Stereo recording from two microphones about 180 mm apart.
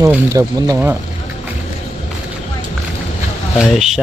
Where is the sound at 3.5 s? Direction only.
5° right (ahead or behind).